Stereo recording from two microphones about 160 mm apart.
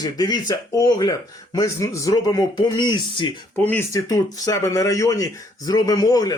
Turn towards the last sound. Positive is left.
turn(degrees=25)  # may be behind; listen again after turning